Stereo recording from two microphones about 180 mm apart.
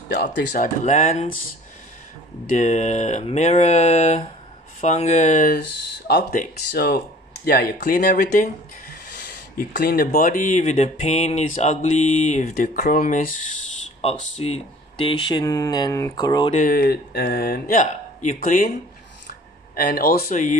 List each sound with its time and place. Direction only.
0.3 s speech: 70° left (ahead or behind)
0.6 s speech: 40° left (ahead or behind)
2.5 s speech: 40° left (ahead or behind)
9.8 s speech: 55° left (ahead or behind)
14.0 s speech: 35° left (ahead or behind)
16.5 s speech: 50° left (ahead or behind)
19.7 s speech: 55° left (ahead or behind)
20.2 s speech: 45° left (ahead or behind)